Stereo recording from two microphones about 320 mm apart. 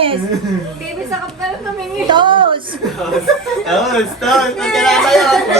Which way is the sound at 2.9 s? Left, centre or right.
Centre.